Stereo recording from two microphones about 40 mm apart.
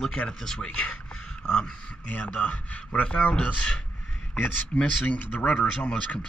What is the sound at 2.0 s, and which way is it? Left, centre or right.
A man's voice, left.